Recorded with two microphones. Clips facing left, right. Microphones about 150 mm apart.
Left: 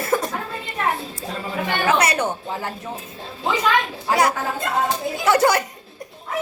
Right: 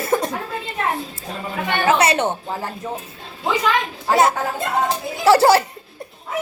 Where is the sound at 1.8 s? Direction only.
30° right (ahead or behind).